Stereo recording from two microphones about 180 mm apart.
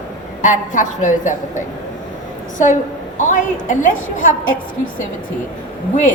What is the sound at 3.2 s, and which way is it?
A woman's voice, 45° left (ahead or behind).